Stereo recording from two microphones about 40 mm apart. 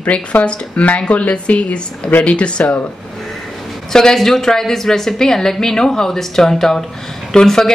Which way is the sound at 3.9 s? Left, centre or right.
Centre.